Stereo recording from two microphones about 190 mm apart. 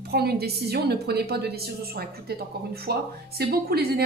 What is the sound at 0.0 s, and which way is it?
A woman's voice, 55° right (ahead or behind).